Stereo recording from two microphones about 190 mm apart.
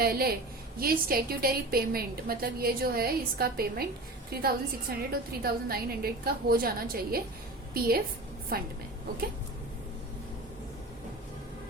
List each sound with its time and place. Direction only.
0.0 s a woman's voice: 55° right (ahead or behind)